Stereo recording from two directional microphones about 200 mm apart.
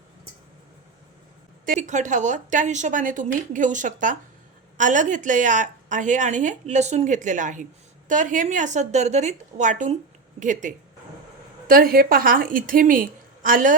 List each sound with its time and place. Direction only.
1.6 s a woman's voice: 40° right (ahead or behind)